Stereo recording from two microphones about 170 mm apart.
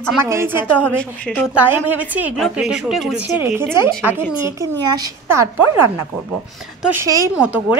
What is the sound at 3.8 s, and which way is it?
A woman's voice, 15° right (ahead or behind).